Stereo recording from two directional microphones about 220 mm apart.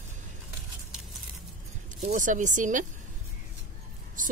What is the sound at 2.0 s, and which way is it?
Speech, 35° right (ahead or behind).